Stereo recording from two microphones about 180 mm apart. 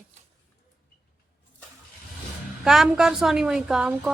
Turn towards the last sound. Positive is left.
turn(degrees=-5)  # may be behind; listen again after turning